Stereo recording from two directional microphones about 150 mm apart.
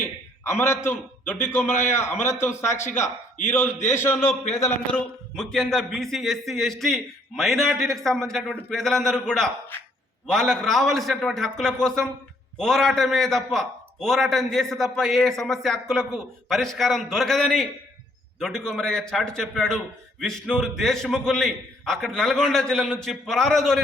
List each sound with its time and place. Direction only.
0.5 s a man's voice: 15° left (ahead or behind)